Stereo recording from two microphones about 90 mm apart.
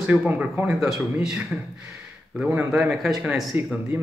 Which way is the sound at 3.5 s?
20° right (ahead or behind).